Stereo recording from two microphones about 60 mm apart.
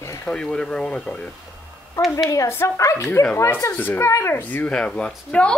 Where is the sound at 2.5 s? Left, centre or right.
Left.